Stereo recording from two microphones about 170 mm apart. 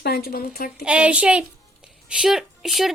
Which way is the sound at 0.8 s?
5° right (ahead or behind).